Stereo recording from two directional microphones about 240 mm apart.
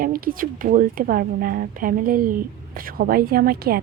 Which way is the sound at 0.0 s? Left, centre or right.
Right.